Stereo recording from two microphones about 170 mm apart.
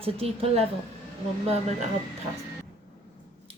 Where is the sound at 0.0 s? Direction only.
35° right (ahead or behind).